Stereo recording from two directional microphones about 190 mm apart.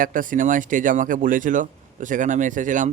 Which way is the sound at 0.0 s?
45° right (ahead or behind).